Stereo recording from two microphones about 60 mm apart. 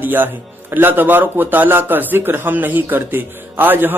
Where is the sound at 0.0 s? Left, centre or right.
Right.